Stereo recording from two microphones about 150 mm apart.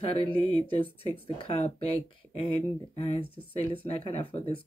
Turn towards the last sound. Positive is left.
turn(degrees=35)  # may be behind; listen again after turning